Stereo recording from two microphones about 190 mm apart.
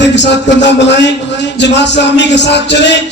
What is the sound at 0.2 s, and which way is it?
A man's voice, 65° left (ahead or behind).